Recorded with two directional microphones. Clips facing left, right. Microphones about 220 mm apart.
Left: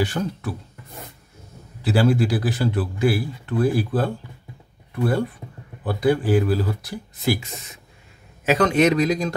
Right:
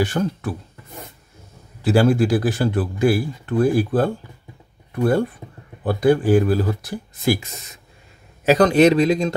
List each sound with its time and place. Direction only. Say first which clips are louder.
0.0 s speech: right 3 dB; 45° right (ahead or behind)
1.8 s speech: right 3 dB; 45° right (ahead or behind)
5.9 s speech: right 4 dB; 45° right (ahead or behind)
8.5 s a man's voice: right 4 dB; 35° right (ahead or behind)